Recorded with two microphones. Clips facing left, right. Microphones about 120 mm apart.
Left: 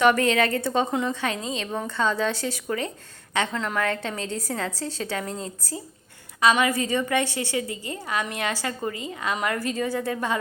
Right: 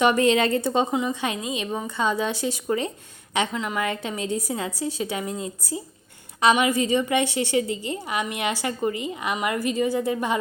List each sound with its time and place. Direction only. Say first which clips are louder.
0.0 s a woman's voice: right 1 dB; 20° right (ahead or behind)